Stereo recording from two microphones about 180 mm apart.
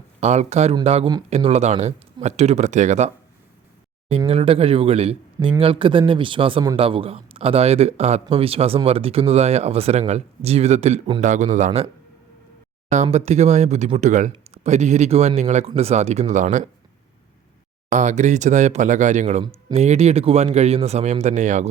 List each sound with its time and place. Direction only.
0.2 s a man's voice: 40° right (ahead or behind)
4.3 s a man's voice: 35° right (ahead or behind)
12.9 s a man's voice: 40° right (ahead or behind)
17.8 s a man's voice: 40° right (ahead or behind)